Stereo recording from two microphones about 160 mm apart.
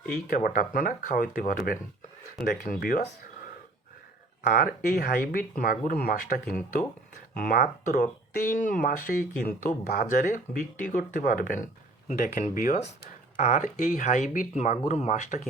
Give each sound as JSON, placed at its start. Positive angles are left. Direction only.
{"t": 0.3, "sound": "speech", "side_deg": 60}
{"t": 2.4, "sound": "speech", "side_deg": 75}
{"t": 4.4, "sound": "speech", "side_deg": 65}